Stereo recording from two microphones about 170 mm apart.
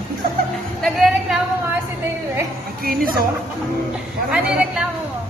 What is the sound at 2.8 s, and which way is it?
Speech, 60° right (ahead or behind).